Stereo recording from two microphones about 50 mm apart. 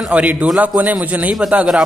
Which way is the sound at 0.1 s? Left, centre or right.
Right.